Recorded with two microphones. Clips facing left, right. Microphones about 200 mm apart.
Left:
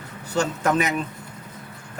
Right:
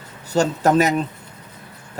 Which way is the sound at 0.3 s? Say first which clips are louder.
Right 5 dB; 35° right (ahead or behind).